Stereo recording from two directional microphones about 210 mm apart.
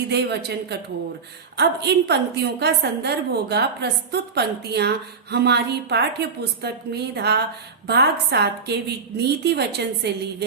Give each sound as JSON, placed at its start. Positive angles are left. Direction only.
{"t": 0.1, "sound": "a woman's voice", "side_deg": -50}